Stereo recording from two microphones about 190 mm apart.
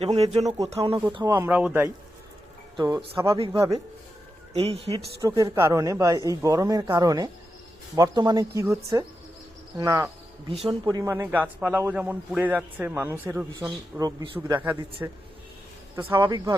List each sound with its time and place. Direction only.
0.0 s speech: 30° right (ahead or behind)
0.4 s a man's voice: 20° right (ahead or behind)
0.7 s speech: 30° right (ahead or behind)
1.1 s a man's voice: 15° right (ahead or behind)
2.7 s speech: 20° right (ahead or behind)
3.3 s speech: 30° right (ahead or behind)
5.2 s a man's voice: 15° right (ahead or behind)
16.2 s speech: 20° right (ahead or behind)